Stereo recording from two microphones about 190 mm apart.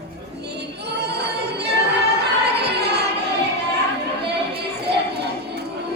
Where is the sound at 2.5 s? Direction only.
60° right (ahead or behind).